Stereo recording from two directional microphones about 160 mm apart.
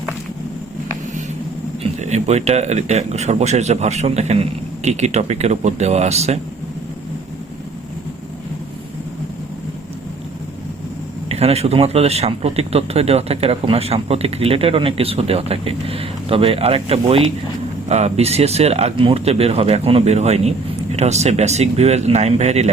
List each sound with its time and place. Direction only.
1.8 s speech: 45° right (ahead or behind)
11.3 s speech: 40° right (ahead or behind)